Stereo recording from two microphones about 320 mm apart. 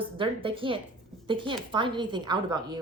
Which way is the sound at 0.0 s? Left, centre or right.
Centre.